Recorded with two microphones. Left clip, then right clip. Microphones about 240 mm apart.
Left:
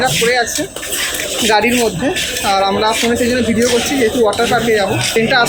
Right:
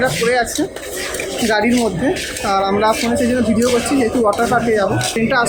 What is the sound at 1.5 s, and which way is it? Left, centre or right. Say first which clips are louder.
A woman's voice: left 3 dB; centre.